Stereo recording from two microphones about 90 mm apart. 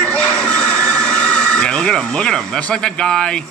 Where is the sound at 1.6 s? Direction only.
10° left (ahead or behind).